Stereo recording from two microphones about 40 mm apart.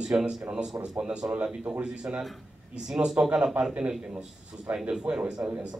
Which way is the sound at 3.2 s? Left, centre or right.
Right.